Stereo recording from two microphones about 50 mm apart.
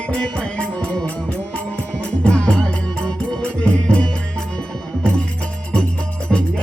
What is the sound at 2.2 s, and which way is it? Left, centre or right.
Music, left.